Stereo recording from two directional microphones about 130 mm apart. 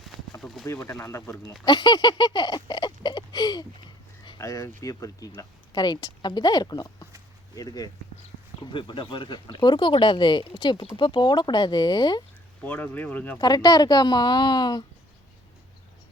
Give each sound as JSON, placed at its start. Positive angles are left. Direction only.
{"t": 0.0, "sound": "a sound", "side_deg": 0}
{"t": 0.7, "sound": "speech", "side_deg": 20}
{"t": 1.6, "sound": "a sound", "side_deg": 35}
{"t": 4.4, "sound": "a woman's voice", "side_deg": 25}
{"t": 12.6, "sound": "speech", "side_deg": 15}
{"t": 13.4, "sound": "a woman's voice", "side_deg": 30}